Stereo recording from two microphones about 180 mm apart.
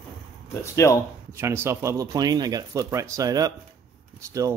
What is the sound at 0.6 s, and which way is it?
Speech, 15° left (ahead or behind).